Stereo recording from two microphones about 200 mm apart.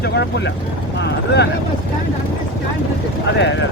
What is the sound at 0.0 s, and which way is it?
Speech, 60° left (ahead or behind).